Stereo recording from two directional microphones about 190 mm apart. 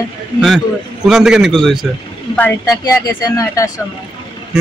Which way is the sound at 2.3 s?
10° left (ahead or behind).